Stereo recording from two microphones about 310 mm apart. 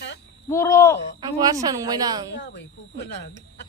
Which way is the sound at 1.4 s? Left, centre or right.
Centre.